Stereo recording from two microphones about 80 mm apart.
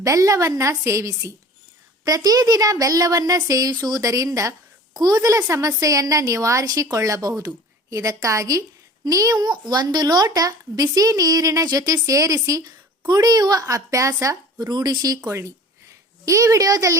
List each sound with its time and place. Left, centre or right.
0.0 s a woman's voice: right
14.7 s a woman's voice: right